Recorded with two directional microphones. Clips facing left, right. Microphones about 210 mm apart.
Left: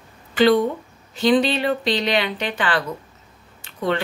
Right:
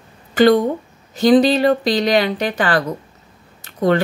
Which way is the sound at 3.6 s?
40° right (ahead or behind).